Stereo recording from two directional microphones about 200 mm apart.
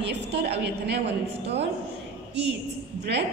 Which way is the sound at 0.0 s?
55° right (ahead or behind).